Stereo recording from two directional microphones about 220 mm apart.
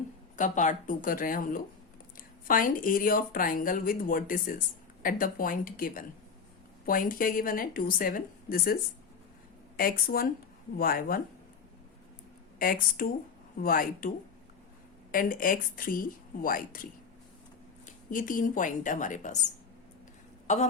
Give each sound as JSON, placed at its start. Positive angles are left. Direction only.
{"t": 0.3, "sound": "a woman's voice", "side_deg": 35}
{"t": 12.5, "sound": "a woman's voice", "side_deg": 40}
{"t": 15.1, "sound": "a woman's voice", "side_deg": 40}
{"t": 18.1, "sound": "a woman's voice", "side_deg": 40}
{"t": 20.5, "sound": "a woman's voice", "side_deg": 30}